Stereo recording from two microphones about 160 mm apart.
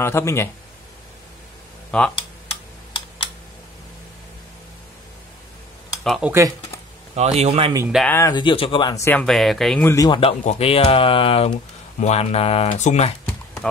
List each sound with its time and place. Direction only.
0.0 s speech: 15° left (ahead or behind)
1.9 s speech: 5° left (ahead or behind)
6.0 s speech: centre (ahead or behind)
7.2 s a man's voice: 40° right (ahead or behind)
7.9 s speech: 5° right (ahead or behind)
8.3 s speech: 30° left (ahead or behind)
8.9 s speech: 15° left (ahead or behind)
9.2 s speech: centre (ahead or behind)
10.0 s a man's voice: 30° left (ahead or behind)
10.4 s speech: 40° left (ahead or behind)